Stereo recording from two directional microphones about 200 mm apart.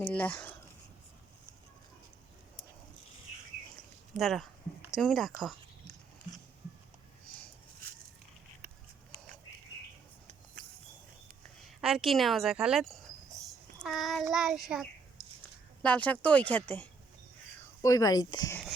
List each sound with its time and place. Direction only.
0.1 s speech: 5° left (ahead or behind)
4.2 s a woman's voice: centre (ahead or behind)
11.8 s a woman's voice: centre (ahead or behind); by 18.6 s 20° left (ahead or behind)